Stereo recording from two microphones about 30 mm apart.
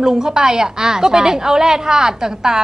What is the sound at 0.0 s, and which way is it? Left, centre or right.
Speech, right.